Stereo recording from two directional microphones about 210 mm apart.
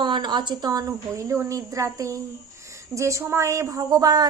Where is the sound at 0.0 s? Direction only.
20° right (ahead or behind).